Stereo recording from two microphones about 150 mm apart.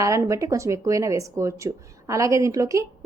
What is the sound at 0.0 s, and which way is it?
A woman's voice, 20° right (ahead or behind).